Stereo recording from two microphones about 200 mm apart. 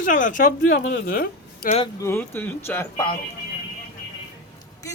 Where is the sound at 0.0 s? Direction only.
40° left (ahead or behind).